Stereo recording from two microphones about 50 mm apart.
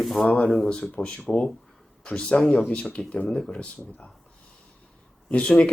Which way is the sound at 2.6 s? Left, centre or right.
Left.